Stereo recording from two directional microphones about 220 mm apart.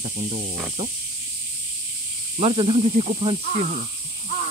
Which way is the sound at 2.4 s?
25° right (ahead or behind).